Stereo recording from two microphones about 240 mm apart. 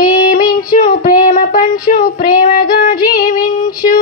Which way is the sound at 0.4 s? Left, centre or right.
Left.